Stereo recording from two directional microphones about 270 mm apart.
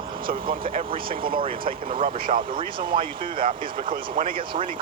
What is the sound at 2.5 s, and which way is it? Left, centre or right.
Speech, centre.